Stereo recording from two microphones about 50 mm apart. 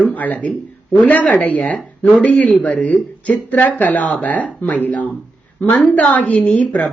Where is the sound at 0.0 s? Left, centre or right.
Left.